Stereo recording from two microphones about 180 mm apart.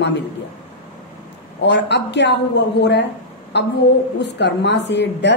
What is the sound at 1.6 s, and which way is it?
A woman's voice, 75° left (ahead or behind).